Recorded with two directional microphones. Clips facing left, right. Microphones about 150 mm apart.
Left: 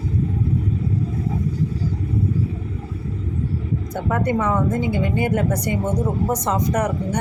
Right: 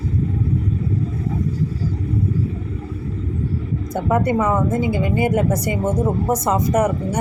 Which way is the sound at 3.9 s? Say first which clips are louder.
Right 3 dB; 10° right (ahead or behind).